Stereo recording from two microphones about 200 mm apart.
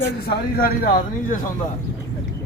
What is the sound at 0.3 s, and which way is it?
Speech, 45° left (ahead or behind).